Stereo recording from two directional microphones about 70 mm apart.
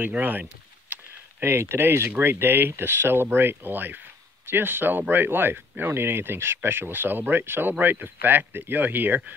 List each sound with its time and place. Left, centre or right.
0.0 s speech: right
1.4 s speech: right